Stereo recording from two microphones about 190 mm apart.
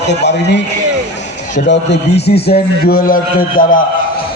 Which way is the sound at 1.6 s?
70° left (ahead or behind).